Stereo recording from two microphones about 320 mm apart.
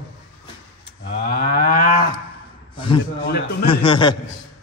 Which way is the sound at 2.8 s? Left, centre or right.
Centre.